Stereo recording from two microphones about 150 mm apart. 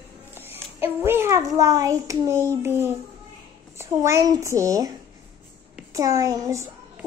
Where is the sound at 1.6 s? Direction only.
20° right (ahead or behind).